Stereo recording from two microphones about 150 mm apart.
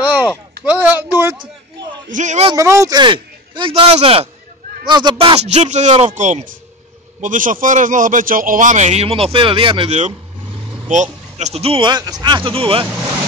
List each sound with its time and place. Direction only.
0.0 s a sound: 15° right (ahead or behind)
0.7 s speech: 15° right (ahead or behind)
2.1 s speech: 50° right (ahead or behind)
2.5 s speech: 20° right (ahead or behind); by 4.3 s 40° right (ahead or behind)
4.8 s speech: 30° right (ahead or behind)
5.4 s a man's voice: 50° right (ahead or behind)
9.8 s speech: 50° right (ahead or behind)